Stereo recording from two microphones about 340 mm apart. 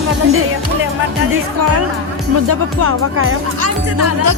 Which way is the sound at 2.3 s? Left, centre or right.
Right.